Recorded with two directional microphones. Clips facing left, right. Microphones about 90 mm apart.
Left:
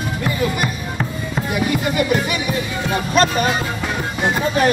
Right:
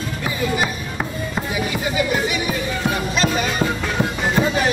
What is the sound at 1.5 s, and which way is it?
Music, 55° left (ahead or behind).